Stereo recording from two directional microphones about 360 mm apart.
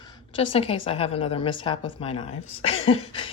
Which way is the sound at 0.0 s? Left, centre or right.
Centre.